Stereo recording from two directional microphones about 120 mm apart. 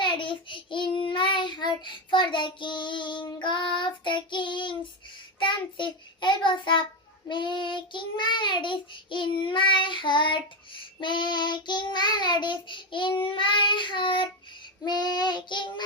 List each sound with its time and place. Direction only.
0.0 s child singing: 40° left (ahead or behind)